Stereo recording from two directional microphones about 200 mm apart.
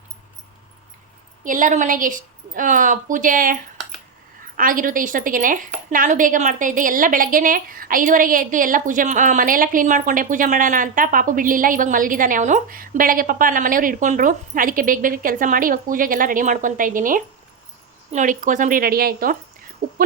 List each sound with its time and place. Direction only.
1.5 s a woman's voice: 40° right (ahead or behind)